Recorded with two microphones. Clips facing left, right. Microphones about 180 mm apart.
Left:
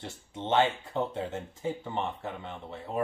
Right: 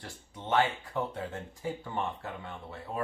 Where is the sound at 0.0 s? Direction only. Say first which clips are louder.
Left 5 dB; 25° left (ahead or behind).